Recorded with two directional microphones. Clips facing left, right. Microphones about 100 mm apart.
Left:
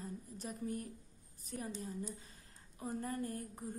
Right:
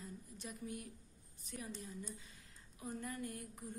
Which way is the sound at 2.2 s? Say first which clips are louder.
Left 1 dB; 40° left (ahead or behind).